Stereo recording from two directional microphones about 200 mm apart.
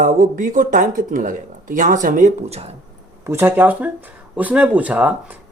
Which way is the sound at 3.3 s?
10° right (ahead or behind).